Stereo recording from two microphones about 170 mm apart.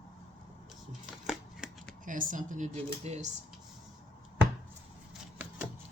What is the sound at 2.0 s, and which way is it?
Speech, 50° right (ahead or behind).